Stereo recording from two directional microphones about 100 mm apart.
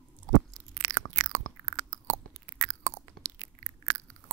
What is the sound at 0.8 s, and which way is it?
Chewing, 30° right (ahead or behind).